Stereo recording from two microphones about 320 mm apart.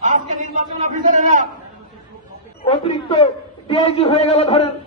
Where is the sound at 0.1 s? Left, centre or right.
Right.